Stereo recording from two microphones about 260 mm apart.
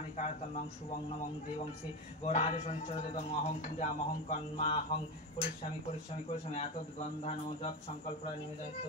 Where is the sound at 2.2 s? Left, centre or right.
Left.